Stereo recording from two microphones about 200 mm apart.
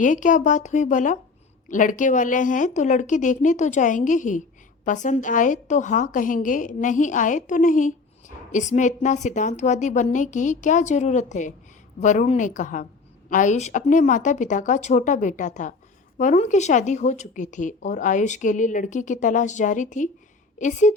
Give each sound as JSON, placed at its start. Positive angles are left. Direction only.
{"t": 0.0, "sound": "a woman's voice", "side_deg": 40}